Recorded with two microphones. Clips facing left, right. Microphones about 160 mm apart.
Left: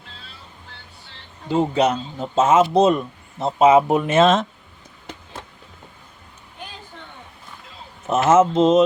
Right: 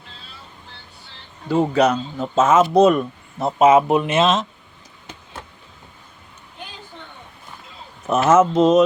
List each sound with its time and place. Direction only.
1.5 s speech: 25° left (ahead or behind)
4.1 s speech: 50° left (ahead or behind)
8.0 s speech: 25° left (ahead or behind)